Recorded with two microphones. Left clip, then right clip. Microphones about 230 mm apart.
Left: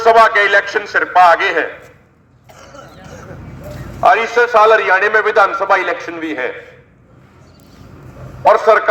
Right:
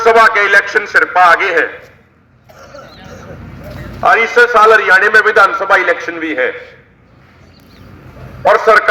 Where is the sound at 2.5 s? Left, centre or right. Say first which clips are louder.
Right 3 dB; centre.